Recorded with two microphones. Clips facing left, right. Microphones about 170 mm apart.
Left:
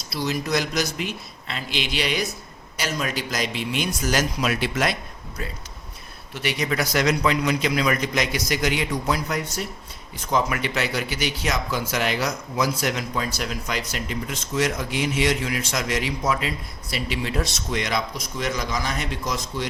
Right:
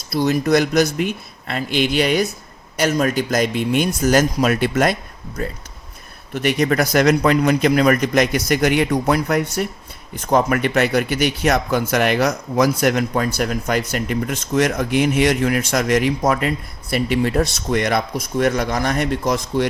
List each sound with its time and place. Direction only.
0.1 s a man's voice: 50° right (ahead or behind)
6.3 s a man's voice: 50° right (ahead or behind)